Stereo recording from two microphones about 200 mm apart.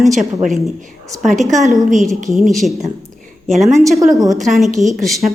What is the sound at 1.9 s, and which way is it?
A woman's voice, centre (ahead or behind).